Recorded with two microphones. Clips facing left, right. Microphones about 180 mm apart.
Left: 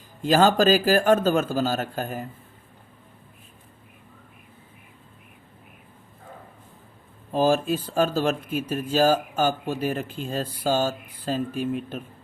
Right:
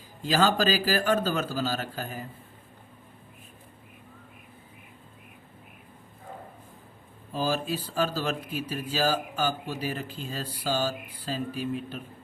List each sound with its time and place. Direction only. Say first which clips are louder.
0.2 s speech: left 6 dB; 50° left (ahead or behind)
7.3 s speech: left 7 dB; 50° left (ahead or behind)